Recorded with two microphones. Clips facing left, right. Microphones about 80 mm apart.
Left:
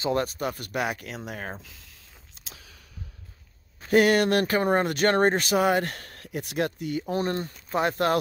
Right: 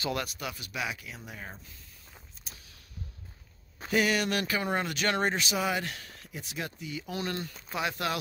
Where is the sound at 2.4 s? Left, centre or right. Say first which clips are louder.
Left 2 dB; left.